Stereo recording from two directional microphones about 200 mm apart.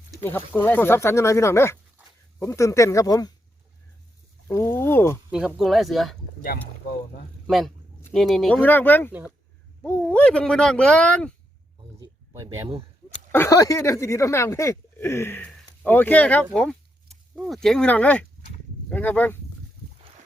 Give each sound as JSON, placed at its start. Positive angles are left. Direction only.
{"t": 0.2, "sound": "speech", "side_deg": 10}
{"t": 4.4, "sound": "speech", "side_deg": 10}
{"t": 5.3, "sound": "speech", "side_deg": -5}
{"t": 6.4, "sound": "speech", "side_deg": 50}
{"t": 7.4, "sound": "speech", "side_deg": 0}
{"t": 13.3, "sound": "speech", "side_deg": 15}